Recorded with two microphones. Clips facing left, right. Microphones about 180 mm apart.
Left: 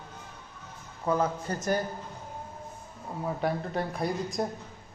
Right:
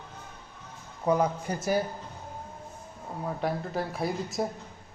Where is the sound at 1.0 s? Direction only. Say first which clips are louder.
Right 2 dB; 15° right (ahead or behind).